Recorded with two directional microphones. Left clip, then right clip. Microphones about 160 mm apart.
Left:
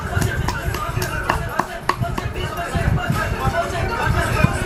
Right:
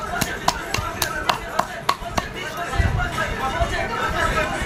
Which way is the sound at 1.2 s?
35° right (ahead or behind).